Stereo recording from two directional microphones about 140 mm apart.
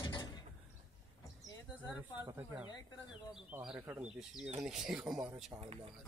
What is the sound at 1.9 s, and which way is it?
Speech, 15° right (ahead or behind).